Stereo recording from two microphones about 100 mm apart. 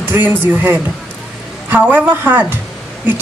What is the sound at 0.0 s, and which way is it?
A man's voice, 20° right (ahead or behind).